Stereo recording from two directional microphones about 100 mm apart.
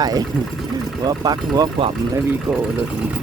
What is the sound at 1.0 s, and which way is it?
Speech, 45° right (ahead or behind).